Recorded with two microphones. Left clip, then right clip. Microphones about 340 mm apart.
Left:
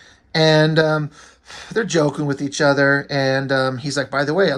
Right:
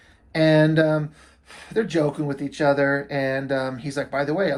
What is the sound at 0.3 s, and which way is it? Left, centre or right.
Speech, centre.